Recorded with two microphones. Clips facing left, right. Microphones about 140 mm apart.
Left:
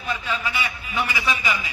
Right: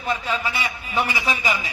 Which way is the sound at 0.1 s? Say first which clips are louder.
Right 2 dB; 35° right (ahead or behind).